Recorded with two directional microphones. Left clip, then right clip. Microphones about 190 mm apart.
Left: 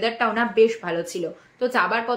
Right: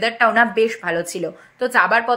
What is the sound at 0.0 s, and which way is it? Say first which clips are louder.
Speech: right 7 dB; 45° right (ahead or behind).